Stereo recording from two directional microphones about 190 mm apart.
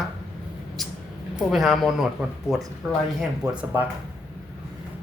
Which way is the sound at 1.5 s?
Centre (ahead or behind).